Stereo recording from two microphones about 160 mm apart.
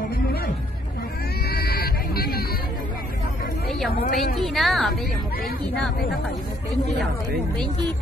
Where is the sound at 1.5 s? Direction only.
75° left (ahead or behind).